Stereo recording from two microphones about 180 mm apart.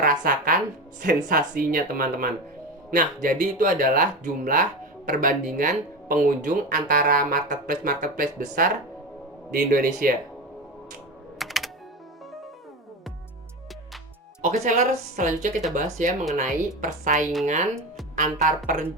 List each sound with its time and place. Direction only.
0.0 s music: 50° right (ahead or behind)
1.0 s speech: 55° right (ahead or behind)
11.3 s typing: centre (ahead or behind)
14.4 s speech: 40° right (ahead or behind)